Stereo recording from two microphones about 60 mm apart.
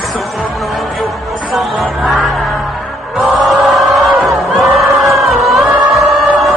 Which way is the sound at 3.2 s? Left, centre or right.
Centre.